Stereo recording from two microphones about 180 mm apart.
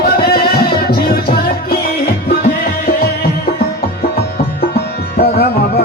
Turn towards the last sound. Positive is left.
turn(degrees=60)  # may be behind; listen again after turning